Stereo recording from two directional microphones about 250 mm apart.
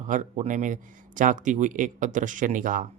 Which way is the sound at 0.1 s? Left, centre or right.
Right.